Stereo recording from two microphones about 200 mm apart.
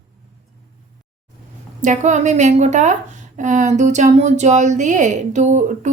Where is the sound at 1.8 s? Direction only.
35° right (ahead or behind).